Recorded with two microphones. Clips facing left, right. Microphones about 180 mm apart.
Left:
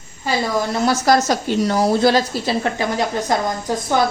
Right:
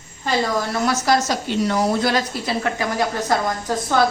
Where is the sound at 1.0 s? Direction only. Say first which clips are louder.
Left 3 dB; 40° left (ahead or behind).